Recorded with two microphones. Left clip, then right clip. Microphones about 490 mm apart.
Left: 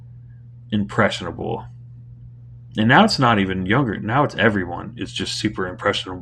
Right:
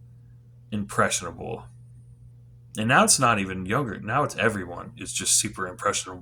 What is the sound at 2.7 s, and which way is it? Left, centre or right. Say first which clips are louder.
Speech: left 5 dB; right.